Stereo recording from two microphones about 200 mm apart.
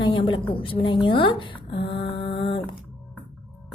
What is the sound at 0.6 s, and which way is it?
Speech, 25° left (ahead or behind).